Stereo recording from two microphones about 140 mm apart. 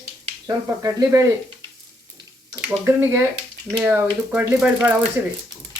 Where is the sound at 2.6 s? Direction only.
15° right (ahead or behind).